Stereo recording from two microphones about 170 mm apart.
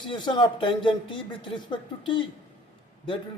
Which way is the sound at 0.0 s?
25° left (ahead or behind).